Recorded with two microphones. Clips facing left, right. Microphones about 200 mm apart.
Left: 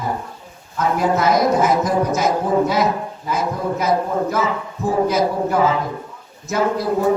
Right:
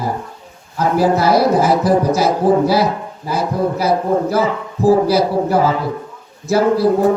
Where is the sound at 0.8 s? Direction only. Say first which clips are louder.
Right 4 dB; 35° right (ahead or behind).